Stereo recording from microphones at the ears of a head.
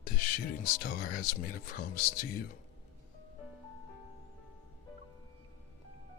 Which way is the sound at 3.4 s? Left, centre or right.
Left.